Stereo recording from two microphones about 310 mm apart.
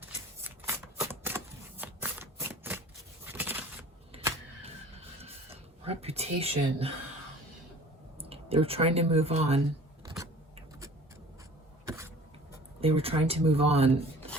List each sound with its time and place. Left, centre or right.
0.0 s a sound: centre
8.2 s speech: centre
11.9 s cough: centre
12.8 s speech: centre